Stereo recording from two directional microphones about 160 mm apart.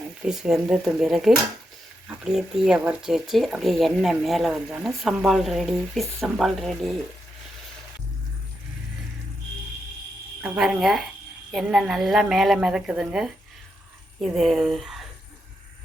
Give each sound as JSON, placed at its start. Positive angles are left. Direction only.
{"t": 0.3, "sound": "speech", "side_deg": -5}
{"t": 10.4, "sound": "speech", "side_deg": -5}